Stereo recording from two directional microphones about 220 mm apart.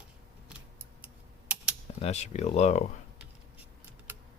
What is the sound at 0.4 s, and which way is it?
Typing, 5° right (ahead or behind).